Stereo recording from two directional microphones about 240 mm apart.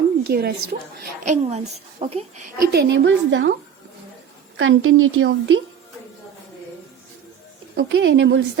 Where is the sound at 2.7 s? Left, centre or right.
Right.